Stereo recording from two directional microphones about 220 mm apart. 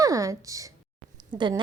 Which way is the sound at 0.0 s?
15° right (ahead or behind).